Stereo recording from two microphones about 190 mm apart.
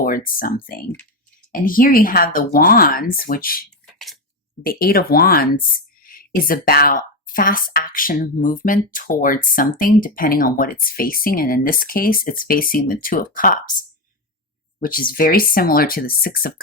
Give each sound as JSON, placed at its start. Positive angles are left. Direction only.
{"t": 0.0, "sound": "speech", "side_deg": 50}
{"t": 3.9, "sound": "a sound", "side_deg": 0}
{"t": 4.6, "sound": "speech", "side_deg": 50}